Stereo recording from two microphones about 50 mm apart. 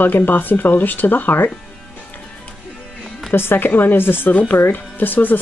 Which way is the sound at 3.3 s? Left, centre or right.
Left.